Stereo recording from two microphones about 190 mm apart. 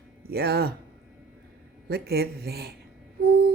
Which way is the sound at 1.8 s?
55° right (ahead or behind).